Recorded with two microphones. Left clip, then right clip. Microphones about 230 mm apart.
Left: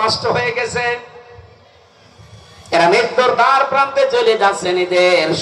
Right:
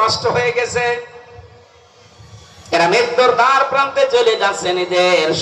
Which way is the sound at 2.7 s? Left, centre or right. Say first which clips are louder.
Left 1 dB; left.